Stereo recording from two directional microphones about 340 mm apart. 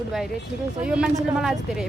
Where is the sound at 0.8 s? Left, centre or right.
Centre.